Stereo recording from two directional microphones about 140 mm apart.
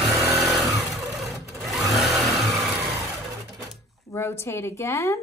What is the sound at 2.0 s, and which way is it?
Vehicle, centre (ahead or behind).